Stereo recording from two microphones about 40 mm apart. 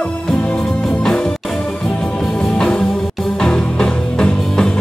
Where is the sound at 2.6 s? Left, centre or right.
Left.